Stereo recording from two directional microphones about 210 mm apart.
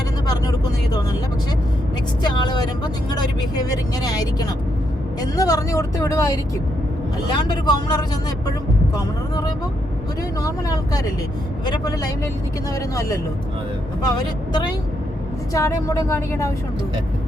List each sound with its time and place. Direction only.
2.2 s speech: 20° left (ahead or behind)
9.0 s speech: 20° left (ahead or behind)
14.0 s speech: 20° left (ahead or behind)